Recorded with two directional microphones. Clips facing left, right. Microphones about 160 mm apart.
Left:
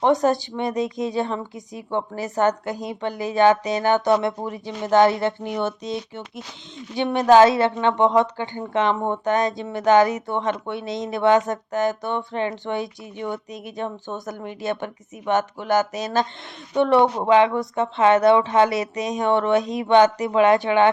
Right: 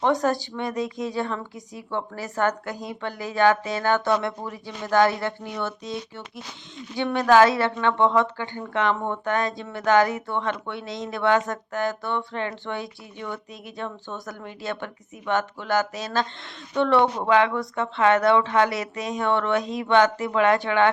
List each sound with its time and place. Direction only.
0.0 s a woman's voice: 20° left (ahead or behind)